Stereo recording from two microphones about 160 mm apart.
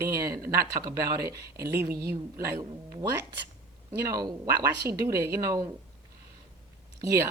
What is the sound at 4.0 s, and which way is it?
Speech, 25° right (ahead or behind).